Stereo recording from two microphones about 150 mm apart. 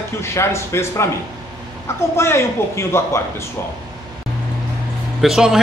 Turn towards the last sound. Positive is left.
turn(degrees=0)  # may be behind; listen again after turning